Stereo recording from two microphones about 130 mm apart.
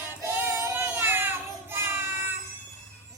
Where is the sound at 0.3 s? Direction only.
20° right (ahead or behind).